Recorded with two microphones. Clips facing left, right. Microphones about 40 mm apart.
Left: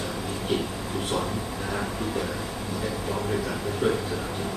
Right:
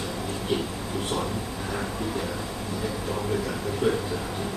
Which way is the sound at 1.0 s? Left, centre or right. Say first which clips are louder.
Left 1 dB; centre.